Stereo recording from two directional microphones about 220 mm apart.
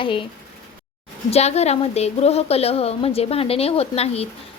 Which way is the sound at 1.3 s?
30° left (ahead or behind).